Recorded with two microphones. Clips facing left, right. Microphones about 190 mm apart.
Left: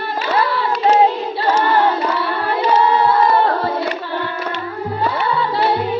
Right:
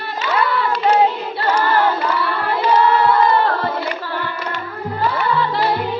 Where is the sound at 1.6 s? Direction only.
25° left (ahead or behind).